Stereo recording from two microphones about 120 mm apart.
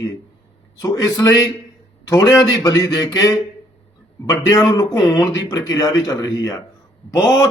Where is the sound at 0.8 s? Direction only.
30° left (ahead or behind).